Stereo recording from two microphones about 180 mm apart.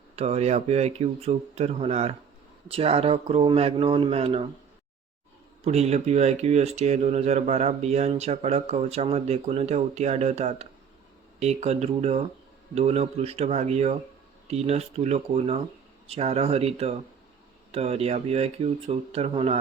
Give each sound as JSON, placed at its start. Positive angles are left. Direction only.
{"t": 0.2, "sound": "speech", "side_deg": -35}
{"t": 5.6, "sound": "speech", "side_deg": -35}